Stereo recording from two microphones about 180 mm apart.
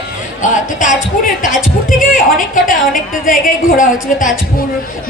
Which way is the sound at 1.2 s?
45° left (ahead or behind).